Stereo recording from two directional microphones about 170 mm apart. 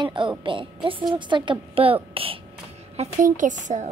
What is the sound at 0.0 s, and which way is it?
A child's voice, 30° right (ahead or behind).